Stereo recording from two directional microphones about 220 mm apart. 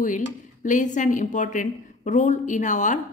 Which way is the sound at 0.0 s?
35° left (ahead or behind).